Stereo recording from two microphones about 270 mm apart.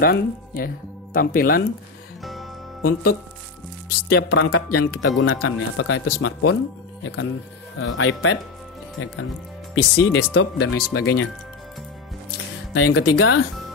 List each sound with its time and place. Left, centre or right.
0.0 s speech: left
2.8 s speech: left
4.2 s speech: left
7.8 s speech: left
9.8 s speech: left
12.7 s speech: left